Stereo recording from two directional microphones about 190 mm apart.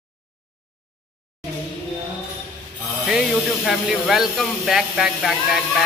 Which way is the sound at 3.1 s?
Centre (ahead or behind).